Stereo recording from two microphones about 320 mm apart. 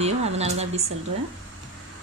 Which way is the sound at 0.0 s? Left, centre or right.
Centre.